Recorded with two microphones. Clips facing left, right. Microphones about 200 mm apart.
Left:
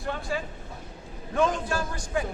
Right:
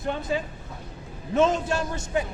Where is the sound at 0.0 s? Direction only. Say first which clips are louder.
Right 4 dB; 20° right (ahead or behind).